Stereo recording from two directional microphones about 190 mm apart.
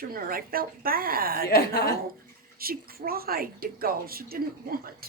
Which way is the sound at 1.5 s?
55° left (ahead or behind).